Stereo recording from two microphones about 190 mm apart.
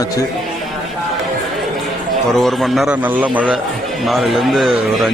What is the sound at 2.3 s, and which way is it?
A man's voice, centre (ahead or behind).